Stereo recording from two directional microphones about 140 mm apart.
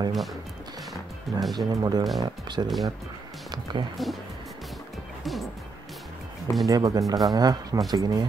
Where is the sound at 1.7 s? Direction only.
30° right (ahead or behind).